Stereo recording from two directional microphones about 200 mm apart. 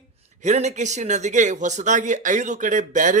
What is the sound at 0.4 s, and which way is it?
Speech, 35° right (ahead or behind).